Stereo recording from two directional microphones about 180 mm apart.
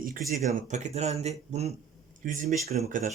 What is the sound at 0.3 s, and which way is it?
Speech, 40° right (ahead or behind).